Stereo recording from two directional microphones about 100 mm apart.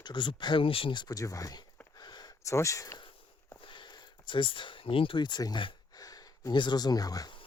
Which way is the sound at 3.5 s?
55° left (ahead or behind).